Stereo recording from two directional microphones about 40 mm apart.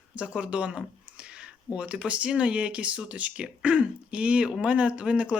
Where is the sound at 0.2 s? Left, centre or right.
Right.